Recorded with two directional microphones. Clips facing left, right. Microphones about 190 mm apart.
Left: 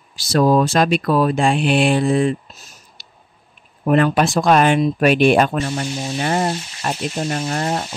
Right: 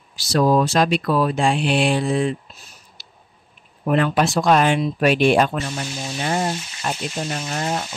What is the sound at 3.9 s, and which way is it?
Speech, 50° left (ahead or behind).